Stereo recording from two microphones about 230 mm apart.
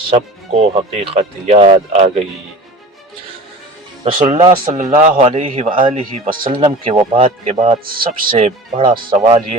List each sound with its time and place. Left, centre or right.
0.1 s speech: right
4.0 s speech: right